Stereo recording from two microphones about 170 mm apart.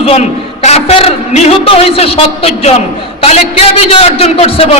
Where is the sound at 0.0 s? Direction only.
40° left (ahead or behind).